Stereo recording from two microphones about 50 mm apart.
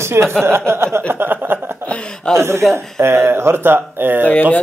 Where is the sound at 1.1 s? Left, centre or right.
Right.